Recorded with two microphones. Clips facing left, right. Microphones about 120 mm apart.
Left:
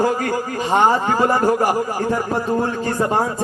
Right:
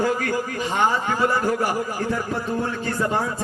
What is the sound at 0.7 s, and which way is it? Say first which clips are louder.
Speech: left 6 dB; 40° left (ahead or behind).